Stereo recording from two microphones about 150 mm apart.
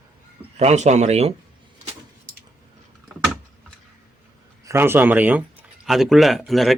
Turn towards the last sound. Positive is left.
turn(degrees=0)  # may be behind; listen again after turning